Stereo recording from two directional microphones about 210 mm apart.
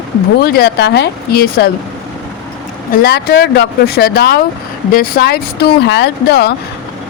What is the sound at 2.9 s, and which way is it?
Speech, 50° left (ahead or behind).